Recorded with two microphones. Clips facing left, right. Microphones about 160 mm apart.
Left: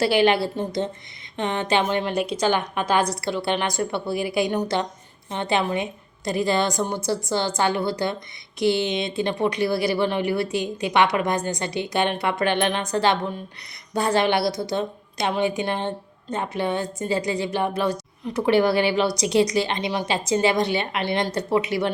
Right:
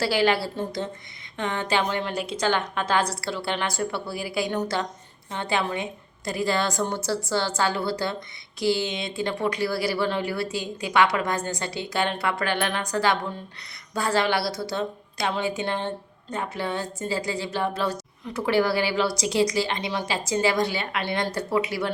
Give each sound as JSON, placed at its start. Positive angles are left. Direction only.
{"t": 0.0, "sound": "a woman's voice", "side_deg": 20}